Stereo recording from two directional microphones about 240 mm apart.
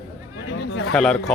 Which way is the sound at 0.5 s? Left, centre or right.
Left.